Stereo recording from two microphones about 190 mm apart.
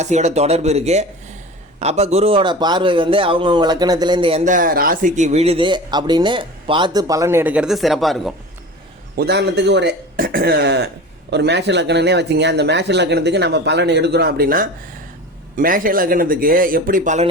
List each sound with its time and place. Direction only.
0.0 s a man's voice: 35° right (ahead or behind); by 8.3 s centre (ahead or behind)
9.1 s speech: 60° right (ahead or behind); by 17.2 s 40° right (ahead or behind)